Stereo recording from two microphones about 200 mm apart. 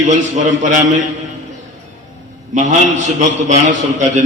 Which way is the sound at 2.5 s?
35° right (ahead or behind).